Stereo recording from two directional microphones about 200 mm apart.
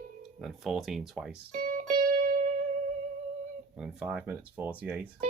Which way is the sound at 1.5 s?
45° right (ahead or behind).